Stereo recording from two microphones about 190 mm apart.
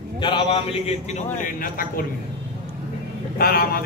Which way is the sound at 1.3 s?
45° left (ahead or behind).